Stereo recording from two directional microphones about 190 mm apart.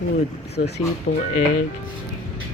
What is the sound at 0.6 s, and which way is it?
Speech, 60° left (ahead or behind).